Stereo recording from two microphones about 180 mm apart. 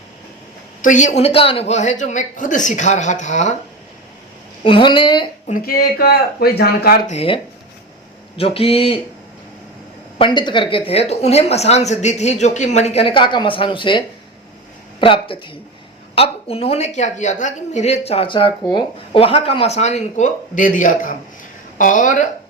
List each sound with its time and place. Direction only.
0.8 s speech: 45° left (ahead or behind)
4.6 s speech: 30° left (ahead or behind)
5.5 s speech: 50° left (ahead or behind)
7.1 s speech: 35° left (ahead or behind)
8.4 s speech: 30° left (ahead or behind)
10.2 s speech: 25° left (ahead or behind)
15.0 s speech: 30° left (ahead or behind); by 22.3 s 45° left (ahead or behind)